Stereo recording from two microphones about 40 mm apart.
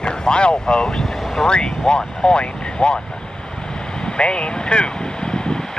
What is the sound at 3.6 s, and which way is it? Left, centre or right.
Vehicle, left.